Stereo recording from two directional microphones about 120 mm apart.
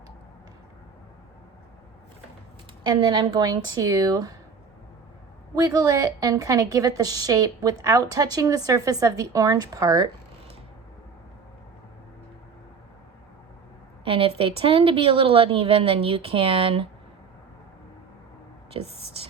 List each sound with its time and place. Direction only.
2.8 s a woman's voice: 35° right (ahead or behind)
5.5 s a woman's voice: 30° right (ahead or behind)
14.0 s a woman's voice: 50° right (ahead or behind)
18.8 s a woman's voice: 50° right (ahead or behind)